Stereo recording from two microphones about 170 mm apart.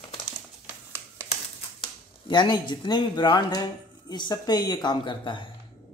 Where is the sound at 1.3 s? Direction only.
30° left (ahead or behind).